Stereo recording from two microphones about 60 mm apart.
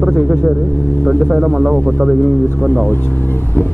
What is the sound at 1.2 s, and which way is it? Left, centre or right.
Speech, right.